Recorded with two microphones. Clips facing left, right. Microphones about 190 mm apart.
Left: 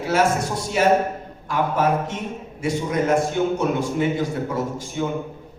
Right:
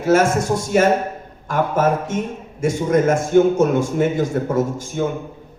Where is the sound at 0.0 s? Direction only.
45° right (ahead or behind).